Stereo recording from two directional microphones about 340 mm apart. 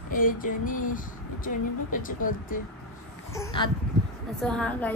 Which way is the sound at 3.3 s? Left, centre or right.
Centre.